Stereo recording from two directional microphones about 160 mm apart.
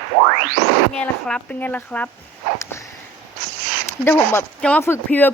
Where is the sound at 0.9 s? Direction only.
10° left (ahead or behind).